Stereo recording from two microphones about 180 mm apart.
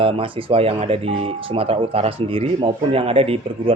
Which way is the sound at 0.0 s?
30° right (ahead or behind).